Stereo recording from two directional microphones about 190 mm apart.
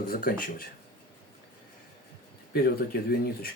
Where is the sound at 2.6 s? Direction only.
55° left (ahead or behind).